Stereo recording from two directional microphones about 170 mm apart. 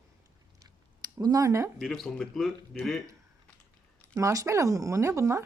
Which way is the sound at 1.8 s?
Centre (ahead or behind).